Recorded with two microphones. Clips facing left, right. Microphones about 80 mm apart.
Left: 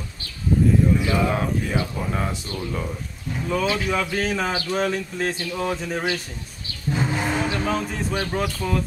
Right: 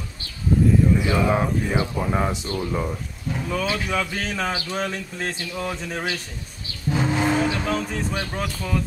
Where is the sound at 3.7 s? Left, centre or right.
Centre.